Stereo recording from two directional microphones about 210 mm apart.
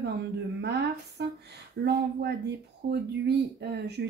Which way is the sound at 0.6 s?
55° right (ahead or behind).